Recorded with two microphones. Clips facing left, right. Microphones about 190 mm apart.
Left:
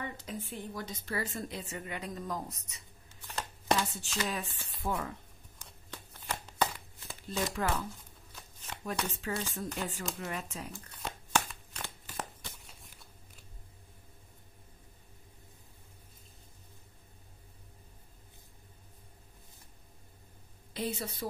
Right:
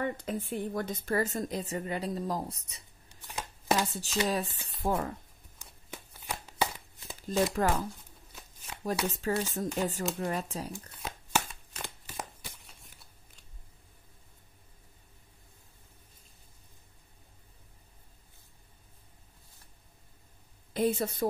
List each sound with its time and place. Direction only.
0.0 s a woman's voice: 50° right (ahead or behind); by 2.8 s 30° right (ahead or behind)
3.3 s chopping: 10° right (ahead or behind)
3.7 s a woman's voice: 40° right (ahead or behind)
5.6 s shuffling cards: 10° right (ahead or behind)
7.2 s speech: 40° right (ahead or behind)
9.0 s a woman's voice: 40° right (ahead or behind)
11.0 s a sound: 5° right (ahead or behind)
20.7 s a woman's voice: 50° right (ahead or behind)